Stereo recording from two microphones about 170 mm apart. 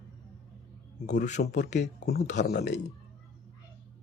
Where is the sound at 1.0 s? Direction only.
45° left (ahead or behind).